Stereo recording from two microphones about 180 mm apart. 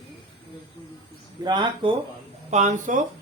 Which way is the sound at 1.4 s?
25° right (ahead or behind).